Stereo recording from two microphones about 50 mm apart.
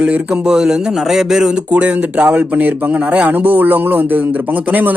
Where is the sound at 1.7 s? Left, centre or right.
Right.